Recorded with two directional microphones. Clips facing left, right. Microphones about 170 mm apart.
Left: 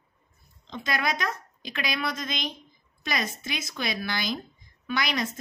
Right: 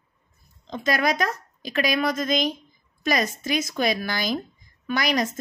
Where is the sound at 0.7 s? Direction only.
45° right (ahead or behind).